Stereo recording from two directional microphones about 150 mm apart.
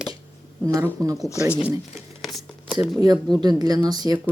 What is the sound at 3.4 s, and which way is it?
Speech, 25° right (ahead or behind).